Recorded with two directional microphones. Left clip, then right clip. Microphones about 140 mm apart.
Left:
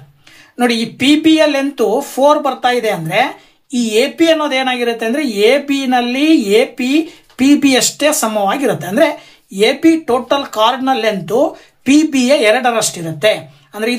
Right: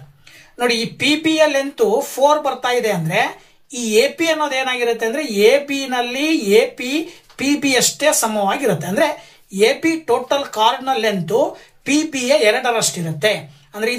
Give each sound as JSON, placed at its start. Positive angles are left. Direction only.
{"t": 0.6, "sound": "speech", "side_deg": 45}